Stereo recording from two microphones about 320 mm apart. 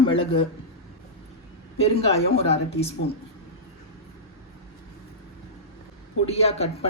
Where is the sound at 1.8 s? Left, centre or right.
Centre.